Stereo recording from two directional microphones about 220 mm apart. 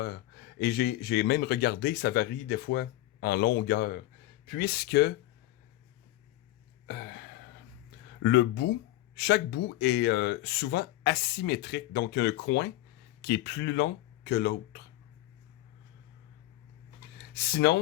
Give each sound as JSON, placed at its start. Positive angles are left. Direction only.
{"t": 0.0, "sound": "speech", "side_deg": 45}
{"t": 6.8, "sound": "a sound", "side_deg": 50}
{"t": 8.2, "sound": "speech", "side_deg": 50}
{"t": 17.3, "sound": "speech", "side_deg": 45}